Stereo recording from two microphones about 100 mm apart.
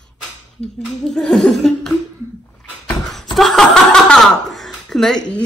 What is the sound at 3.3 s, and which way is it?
Chuckle, 5° left (ahead or behind).